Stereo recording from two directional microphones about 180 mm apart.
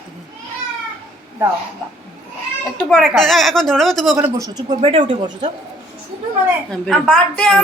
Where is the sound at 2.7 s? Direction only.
5° left (ahead or behind).